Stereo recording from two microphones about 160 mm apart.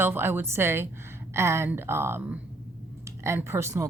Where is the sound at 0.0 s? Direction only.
15° right (ahead or behind).